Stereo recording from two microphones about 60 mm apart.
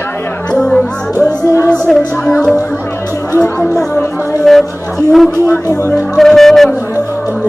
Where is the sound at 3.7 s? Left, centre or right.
Left.